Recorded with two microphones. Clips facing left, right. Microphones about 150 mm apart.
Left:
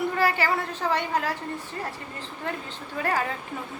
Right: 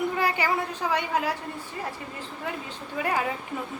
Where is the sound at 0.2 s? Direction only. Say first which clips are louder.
Left 1 dB; 15° right (ahead or behind).